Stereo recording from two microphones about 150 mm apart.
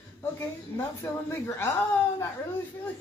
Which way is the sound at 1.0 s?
15° left (ahead or behind).